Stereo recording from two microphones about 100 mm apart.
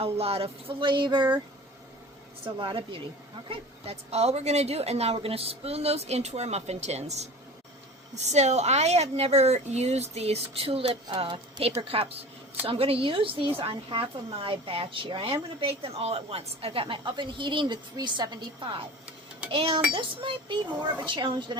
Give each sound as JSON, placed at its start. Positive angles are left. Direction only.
{"t": 0.0, "sound": "speech", "side_deg": -80}
{"t": 2.6, "sound": "a woman's voice", "side_deg": -60}
{"t": 3.5, "sound": "a woman's voice", "side_deg": -85}
{"t": 8.3, "sound": "a woman's voice", "side_deg": -90}
{"t": 11.2, "sound": "a woman's voice", "side_deg": -65}
{"t": 19.5, "sound": "a woman's voice", "side_deg": -65}